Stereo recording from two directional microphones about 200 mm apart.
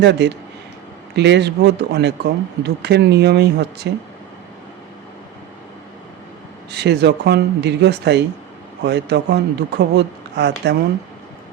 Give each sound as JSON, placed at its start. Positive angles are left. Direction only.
{"t": 0.0, "sound": "speech", "side_deg": -60}
{"t": 6.7, "sound": "speech", "side_deg": -55}